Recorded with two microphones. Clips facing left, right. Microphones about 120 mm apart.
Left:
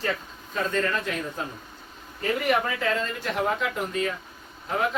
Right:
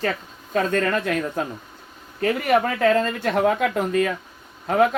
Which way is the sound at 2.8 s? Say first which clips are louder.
Right 8 dB; 65° right (ahead or behind).